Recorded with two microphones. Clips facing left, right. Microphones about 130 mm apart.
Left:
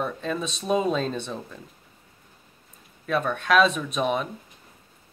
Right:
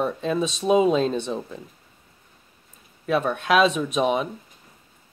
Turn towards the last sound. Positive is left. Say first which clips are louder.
# right 3 dB
turn(degrees=-15)  # may be behind; listen again after turning